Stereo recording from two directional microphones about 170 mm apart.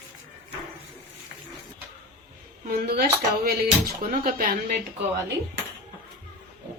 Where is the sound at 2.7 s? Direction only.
65° right (ahead or behind).